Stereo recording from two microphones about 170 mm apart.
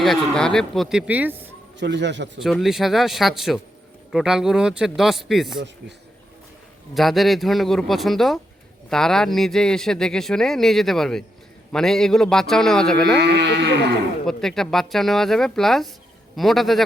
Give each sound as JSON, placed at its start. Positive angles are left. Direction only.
{"t": 0.0, "sound": "a man's voice", "side_deg": 5}
{"t": 1.8, "sound": "a man's voice", "side_deg": -90}
{"t": 2.4, "sound": "a man's voice", "side_deg": 0}
{"t": 6.9, "sound": "a man's voice", "side_deg": 0}
{"t": 13.1, "sound": "speech", "side_deg": -80}
{"t": 14.3, "sound": "a man's voice", "side_deg": 0}